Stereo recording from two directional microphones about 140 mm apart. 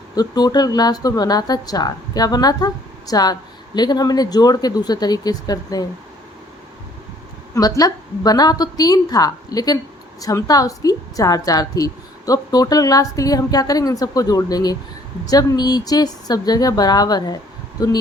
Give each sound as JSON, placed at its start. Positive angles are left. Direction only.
{"t": 0.2, "sound": "a woman's voice", "side_deg": 30}
{"t": 7.8, "sound": "a woman's voice", "side_deg": 25}